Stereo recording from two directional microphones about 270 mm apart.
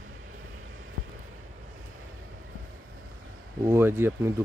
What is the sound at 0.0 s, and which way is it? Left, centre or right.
Vehicle, right.